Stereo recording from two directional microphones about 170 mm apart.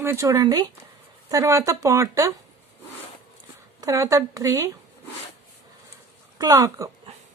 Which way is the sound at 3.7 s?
20° right (ahead or behind).